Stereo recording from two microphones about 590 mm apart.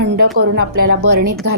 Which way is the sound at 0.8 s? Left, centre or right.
Right.